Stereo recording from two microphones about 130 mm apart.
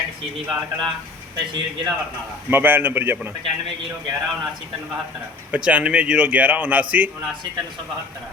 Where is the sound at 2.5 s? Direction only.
15° right (ahead or behind).